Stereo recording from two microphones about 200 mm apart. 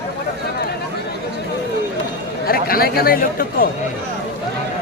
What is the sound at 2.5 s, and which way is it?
Speech, 50° left (ahead or behind).